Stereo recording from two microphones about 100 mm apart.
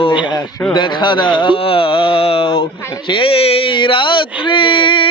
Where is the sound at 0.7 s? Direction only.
50° left (ahead or behind).